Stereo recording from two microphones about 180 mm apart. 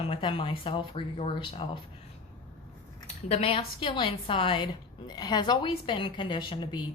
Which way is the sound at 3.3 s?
30° left (ahead or behind).